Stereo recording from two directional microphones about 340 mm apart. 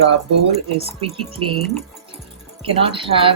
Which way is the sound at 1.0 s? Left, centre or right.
Centre.